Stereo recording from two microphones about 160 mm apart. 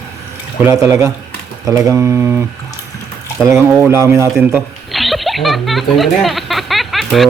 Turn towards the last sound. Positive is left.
turn(degrees=0)  # may be behind; listen again after turning